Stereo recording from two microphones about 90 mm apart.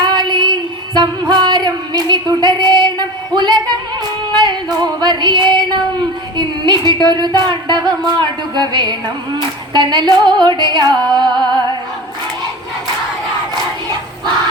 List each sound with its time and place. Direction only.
0.0 s female singing: 50° right (ahead or behind)
0.9 s music: 50° right (ahead or behind)
4.4 s female singing: 55° right (ahead or behind)
6.3 s a sound: 55° right (ahead or behind)